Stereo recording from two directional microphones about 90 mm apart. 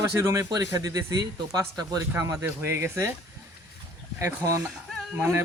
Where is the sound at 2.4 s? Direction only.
25° right (ahead or behind).